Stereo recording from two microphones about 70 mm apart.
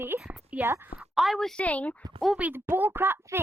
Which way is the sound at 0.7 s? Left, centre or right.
Right.